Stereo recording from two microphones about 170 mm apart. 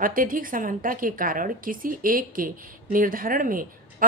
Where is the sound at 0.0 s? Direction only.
55° right (ahead or behind).